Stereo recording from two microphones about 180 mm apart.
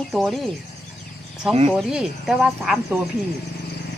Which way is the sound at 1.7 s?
Centre (ahead or behind).